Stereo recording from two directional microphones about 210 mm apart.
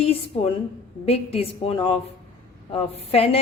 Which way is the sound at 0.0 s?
25° left (ahead or behind).